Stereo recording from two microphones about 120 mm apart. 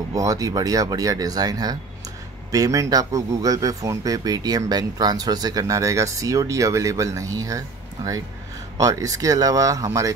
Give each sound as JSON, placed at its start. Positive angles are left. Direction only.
{"t": 0.1, "sound": "speech", "side_deg": -30}